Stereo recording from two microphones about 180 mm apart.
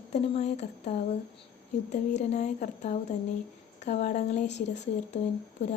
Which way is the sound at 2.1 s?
40° left (ahead or behind).